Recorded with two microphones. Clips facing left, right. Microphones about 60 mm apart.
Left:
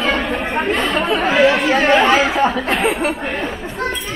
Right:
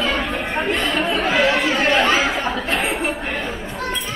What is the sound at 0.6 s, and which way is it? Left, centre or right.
Chatter, left.